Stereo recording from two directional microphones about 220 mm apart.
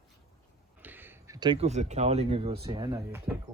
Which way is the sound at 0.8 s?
10° right (ahead or behind).